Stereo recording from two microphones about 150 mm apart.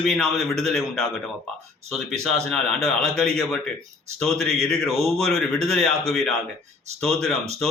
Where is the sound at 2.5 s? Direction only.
5° left (ahead or behind).